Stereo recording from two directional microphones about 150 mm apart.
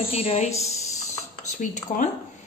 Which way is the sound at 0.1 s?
40° left (ahead or behind).